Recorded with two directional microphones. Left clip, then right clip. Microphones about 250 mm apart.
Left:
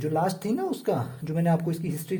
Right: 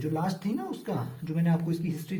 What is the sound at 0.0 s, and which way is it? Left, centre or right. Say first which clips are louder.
Speech: left 5 dB; left.